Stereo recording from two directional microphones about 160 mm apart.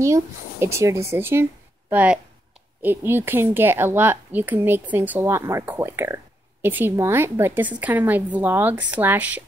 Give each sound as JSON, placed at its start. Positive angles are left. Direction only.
{"t": 0.0, "sound": "a woman's voice", "side_deg": -15}